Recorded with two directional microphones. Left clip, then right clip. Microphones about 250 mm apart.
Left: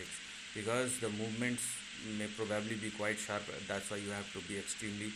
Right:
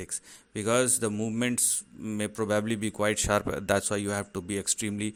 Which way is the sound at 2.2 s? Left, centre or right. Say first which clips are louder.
Right 10 dB; right.